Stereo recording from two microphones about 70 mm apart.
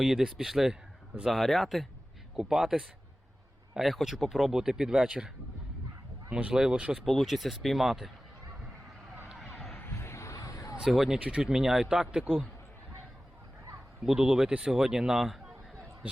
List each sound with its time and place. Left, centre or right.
0.0 s speech: centre
6.3 s speech: centre
6.9 s speech: centre
9.7 s a sound: left
10.3 s a sound: left
10.8 s speech: centre
14.0 s speech: centre